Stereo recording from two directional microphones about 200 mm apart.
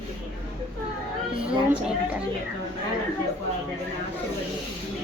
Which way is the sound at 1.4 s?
5° right (ahead or behind).